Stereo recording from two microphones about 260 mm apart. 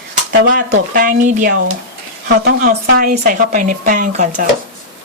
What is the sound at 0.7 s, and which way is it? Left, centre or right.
A woman's voice, right.